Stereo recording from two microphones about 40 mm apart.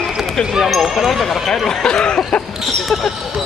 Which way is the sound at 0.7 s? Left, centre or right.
Centre.